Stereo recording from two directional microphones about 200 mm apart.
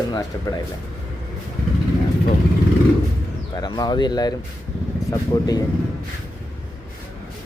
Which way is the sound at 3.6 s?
20° left (ahead or behind).